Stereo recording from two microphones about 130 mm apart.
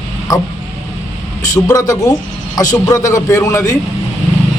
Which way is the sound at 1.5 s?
30° left (ahead or behind).